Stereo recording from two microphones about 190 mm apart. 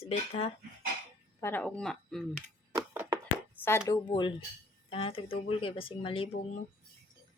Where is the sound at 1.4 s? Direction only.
10° left (ahead or behind).